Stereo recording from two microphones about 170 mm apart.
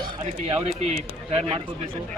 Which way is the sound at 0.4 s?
40° right (ahead or behind).